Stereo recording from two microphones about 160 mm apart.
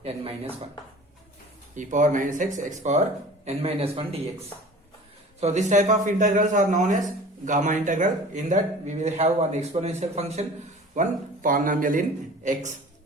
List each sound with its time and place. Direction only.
0.0 s a man's voice: 40° right (ahead or behind)
1.7 s a man's voice: 50° right (ahead or behind)
5.4 s a man's voice: 45° right (ahead or behind)
10.9 s speech: 55° right (ahead or behind)